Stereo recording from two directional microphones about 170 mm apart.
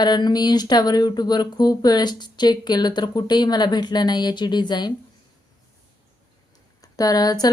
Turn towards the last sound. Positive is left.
turn(degrees=20)  # may be behind; listen again after turning